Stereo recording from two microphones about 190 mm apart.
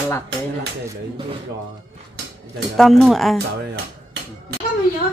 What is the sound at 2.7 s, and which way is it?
Speech, centre (ahead or behind).